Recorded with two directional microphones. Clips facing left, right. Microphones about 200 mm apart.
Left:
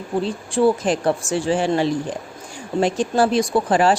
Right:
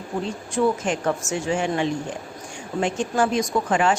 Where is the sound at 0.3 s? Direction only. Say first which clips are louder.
Left 4 dB; 30° left (ahead or behind).